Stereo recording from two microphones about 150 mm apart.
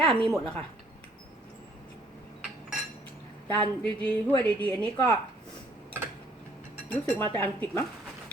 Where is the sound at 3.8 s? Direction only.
10° left (ahead or behind).